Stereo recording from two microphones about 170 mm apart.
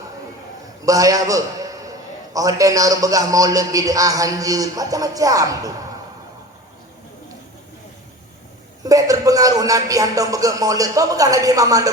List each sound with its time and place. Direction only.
0.9 s a man's voice: 20° right (ahead or behind)
8.8 s a man's voice: 20° right (ahead or behind)